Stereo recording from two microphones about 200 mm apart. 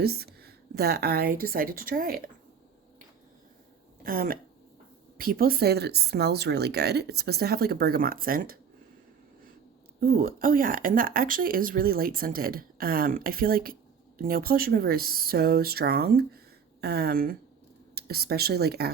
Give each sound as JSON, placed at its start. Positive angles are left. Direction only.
{"t": 0.0, "sound": "speech", "side_deg": -50}
{"t": 4.0, "sound": "speech", "side_deg": -45}
{"t": 10.0, "sound": "speech", "side_deg": -50}